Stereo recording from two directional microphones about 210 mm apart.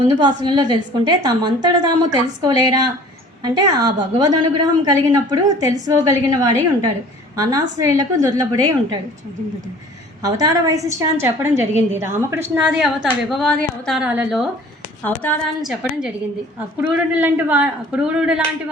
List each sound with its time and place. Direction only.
0.2 s a woman's voice: 20° right (ahead or behind)
10.2 s a woman's voice: 15° right (ahead or behind)
15.0 s a woman's voice: 5° left (ahead or behind)